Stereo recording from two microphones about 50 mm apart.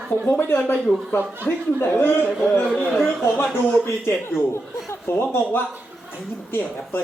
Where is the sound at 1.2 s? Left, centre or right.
Right.